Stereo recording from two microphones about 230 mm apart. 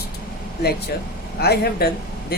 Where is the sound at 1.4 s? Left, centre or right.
Left.